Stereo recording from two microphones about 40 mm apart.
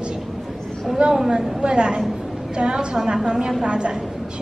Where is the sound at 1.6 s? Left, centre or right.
Right.